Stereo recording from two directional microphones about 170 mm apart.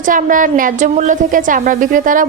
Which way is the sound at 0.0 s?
50° right (ahead or behind).